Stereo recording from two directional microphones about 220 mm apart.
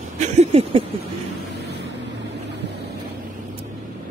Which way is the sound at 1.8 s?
50° right (ahead or behind).